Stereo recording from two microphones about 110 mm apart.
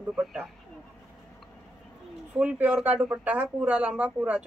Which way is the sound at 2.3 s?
10° right (ahead or behind).